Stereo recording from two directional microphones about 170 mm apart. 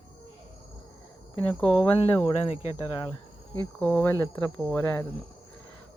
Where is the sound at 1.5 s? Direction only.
5° left (ahead or behind).